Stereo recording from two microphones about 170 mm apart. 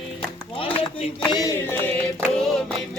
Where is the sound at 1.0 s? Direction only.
25° left (ahead or behind).